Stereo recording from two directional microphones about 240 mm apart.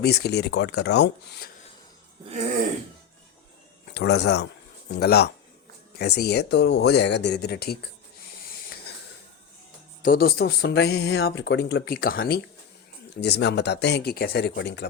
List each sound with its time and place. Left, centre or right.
0.0 s speech: left
3.9 s speech: left
10.0 s speech: left